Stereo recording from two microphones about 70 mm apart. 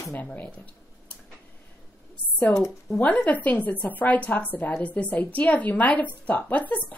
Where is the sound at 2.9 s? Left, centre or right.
Centre.